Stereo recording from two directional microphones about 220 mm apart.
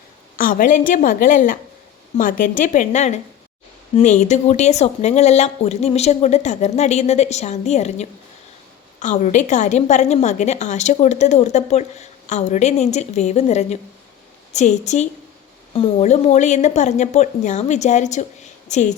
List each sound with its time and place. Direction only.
0.3 s a woman's voice: 40° left (ahead or behind)